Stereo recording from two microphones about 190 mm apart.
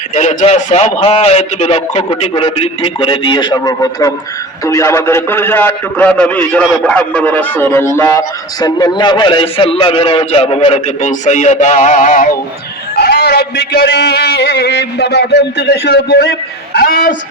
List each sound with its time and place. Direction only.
0.1 s a man's voice: 40° left (ahead or behind)
13.0 s a sound: 60° left (ahead or behind)
16.7 s a man's voice: 50° left (ahead or behind)